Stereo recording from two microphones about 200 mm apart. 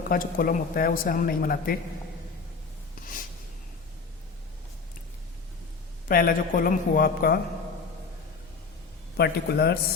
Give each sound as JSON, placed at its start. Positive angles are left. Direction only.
{"t": 0.1, "sound": "a man's voice", "side_deg": 45}
{"t": 6.1, "sound": "a man's voice", "side_deg": 45}
{"t": 9.1, "sound": "a man's voice", "side_deg": 55}